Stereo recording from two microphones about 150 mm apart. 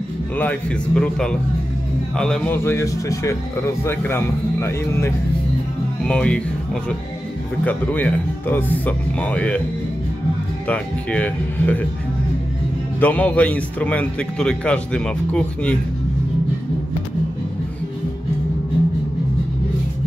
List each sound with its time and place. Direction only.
0.4 s a man's voice: 10° left (ahead or behind)
10.7 s a man's voice: 10° left (ahead or behind)
13.0 s a man's voice: 10° left (ahead or behind)